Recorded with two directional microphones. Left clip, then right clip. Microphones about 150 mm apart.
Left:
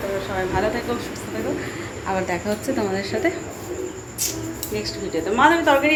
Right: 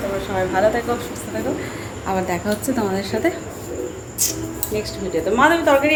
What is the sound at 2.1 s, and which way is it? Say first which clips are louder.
A woman's voice: right 2 dB; 20° right (ahead or behind).